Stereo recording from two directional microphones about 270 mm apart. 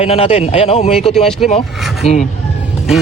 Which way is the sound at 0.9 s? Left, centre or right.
Centre.